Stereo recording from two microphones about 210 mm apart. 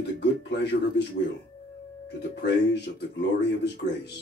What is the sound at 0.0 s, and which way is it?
Speech, 55° left (ahead or behind).